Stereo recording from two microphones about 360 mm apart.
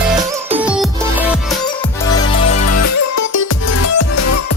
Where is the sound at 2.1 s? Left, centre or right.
Left.